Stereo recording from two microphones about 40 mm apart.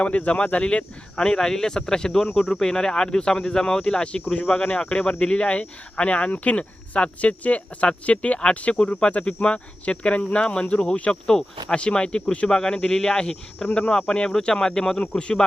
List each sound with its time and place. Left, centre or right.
0.0 s speech: left
1.2 s speech: centre; by 12.5 s left
12.5 s speech: centre